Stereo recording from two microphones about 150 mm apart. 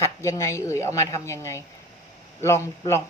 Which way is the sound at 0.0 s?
20° left (ahead or behind).